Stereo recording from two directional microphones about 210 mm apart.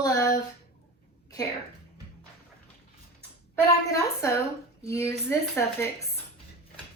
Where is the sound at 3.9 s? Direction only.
15° left (ahead or behind).